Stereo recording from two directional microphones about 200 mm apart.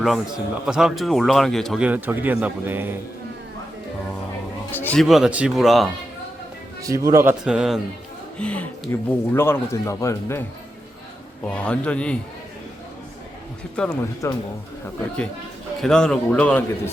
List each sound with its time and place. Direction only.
0.0 s speech: centre (ahead or behind)
4.7 s speech: 10° left (ahead or behind)
5.0 s speech: centre (ahead or behind)
6.8 s speech: 15° right (ahead or behind)
7.4 s speech: 5° right (ahead or behind); by 10.4 s 15° left (ahead or behind)
11.4 s speech: 5° left (ahead or behind)
13.8 s speech: 5° left (ahead or behind)
14.2 s speech: 15° left (ahead or behind)
15.8 s speech: 5° left (ahead or behind)